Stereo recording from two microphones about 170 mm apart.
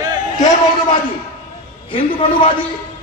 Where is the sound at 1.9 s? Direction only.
30° left (ahead or behind).